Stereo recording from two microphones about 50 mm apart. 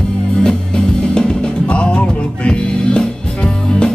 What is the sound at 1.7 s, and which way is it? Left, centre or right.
Music, left.